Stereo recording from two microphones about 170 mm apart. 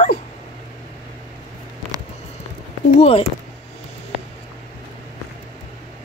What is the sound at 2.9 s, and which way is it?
Speech, 35° left (ahead or behind).